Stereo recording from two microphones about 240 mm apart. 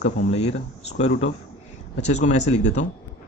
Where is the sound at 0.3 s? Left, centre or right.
Left.